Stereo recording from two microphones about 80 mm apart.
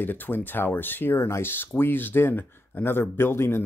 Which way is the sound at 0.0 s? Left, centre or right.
Left.